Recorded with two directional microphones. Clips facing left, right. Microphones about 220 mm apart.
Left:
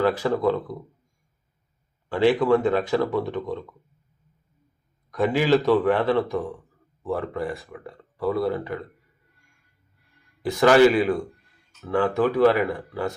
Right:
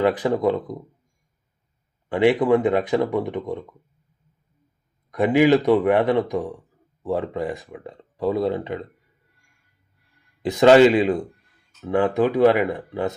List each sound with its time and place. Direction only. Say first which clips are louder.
0.0 s speech: right 2 dB; 20° right (ahead or behind)
2.0 s speech: right 2 dB; 20° right (ahead or behind)
5.1 s speech: right 4 dB; 20° right (ahead or behind)
10.4 s speech: right 3 dB; 20° right (ahead or behind)